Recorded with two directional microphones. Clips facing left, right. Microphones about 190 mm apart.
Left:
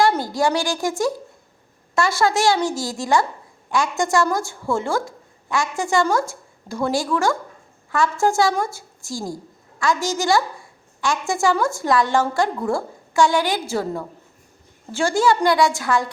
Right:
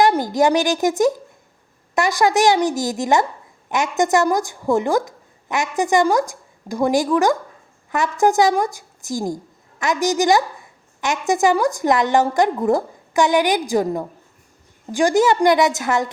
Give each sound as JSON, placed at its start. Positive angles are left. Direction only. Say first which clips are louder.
{"t": 0.0, "sound": "a woman's voice", "louder": "right 3 dB", "side_deg": -15}